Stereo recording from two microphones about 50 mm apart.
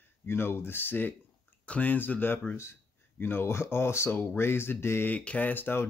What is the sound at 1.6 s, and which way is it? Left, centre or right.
Speech, left.